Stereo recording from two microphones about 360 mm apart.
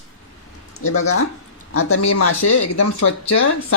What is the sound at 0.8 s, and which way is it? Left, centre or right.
Speech, left.